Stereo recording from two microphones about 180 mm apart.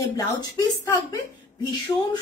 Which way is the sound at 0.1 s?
20° left (ahead or behind).